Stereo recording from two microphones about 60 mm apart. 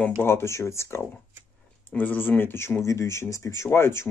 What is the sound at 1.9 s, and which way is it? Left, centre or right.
Speech, left.